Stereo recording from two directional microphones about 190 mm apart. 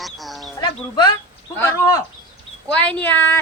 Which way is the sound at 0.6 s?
25° left (ahead or behind).